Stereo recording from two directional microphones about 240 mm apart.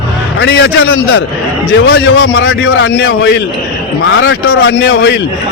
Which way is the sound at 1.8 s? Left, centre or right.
Left.